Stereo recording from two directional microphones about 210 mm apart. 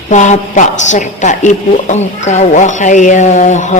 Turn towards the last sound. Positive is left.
turn(degrees=35)  # may be behind; listen again after turning